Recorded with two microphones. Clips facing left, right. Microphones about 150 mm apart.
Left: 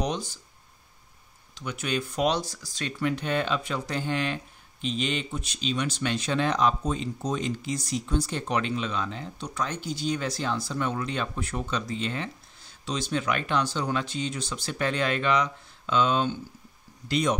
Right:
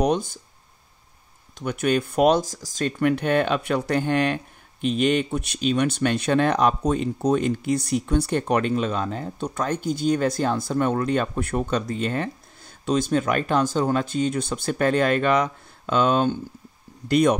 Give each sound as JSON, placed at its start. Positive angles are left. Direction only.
{"t": 0.0, "sound": "speech", "side_deg": -55}
{"t": 1.6, "sound": "speech", "side_deg": -55}